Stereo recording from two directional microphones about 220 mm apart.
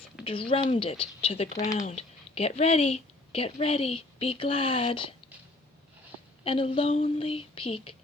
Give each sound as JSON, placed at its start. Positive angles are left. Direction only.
{"t": 0.3, "sound": "speech", "side_deg": 25}
{"t": 6.4, "sound": "speech", "side_deg": 25}